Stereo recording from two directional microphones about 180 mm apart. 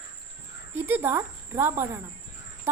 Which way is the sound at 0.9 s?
10° right (ahead or behind).